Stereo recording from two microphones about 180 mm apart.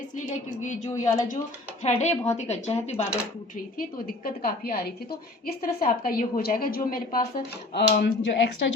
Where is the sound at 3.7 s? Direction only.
55° left (ahead or behind).